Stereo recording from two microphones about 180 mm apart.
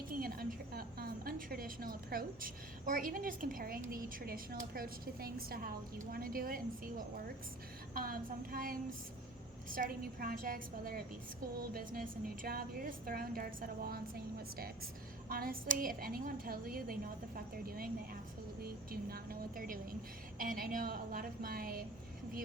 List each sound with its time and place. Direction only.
0.1 s a woman's voice: 55° right (ahead or behind)
7.9 s a woman's voice: 50° right (ahead or behind)
15.3 s a woman's voice: 55° right (ahead or behind)